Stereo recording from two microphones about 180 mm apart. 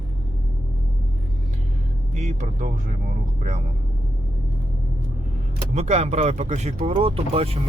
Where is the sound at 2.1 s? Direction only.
40° right (ahead or behind).